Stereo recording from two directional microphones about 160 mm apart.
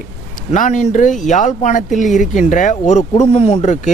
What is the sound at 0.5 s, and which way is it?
Speech, 50° left (ahead or behind).